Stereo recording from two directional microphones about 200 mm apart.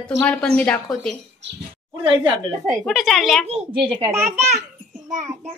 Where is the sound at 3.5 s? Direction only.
30° right (ahead or behind).